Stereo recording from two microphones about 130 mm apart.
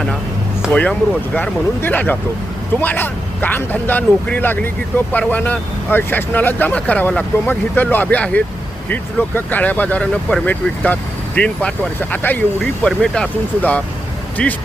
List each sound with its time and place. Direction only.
0.7 s speech: 10° left (ahead or behind)